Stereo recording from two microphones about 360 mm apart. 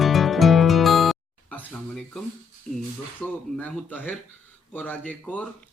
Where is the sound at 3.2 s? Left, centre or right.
Centre.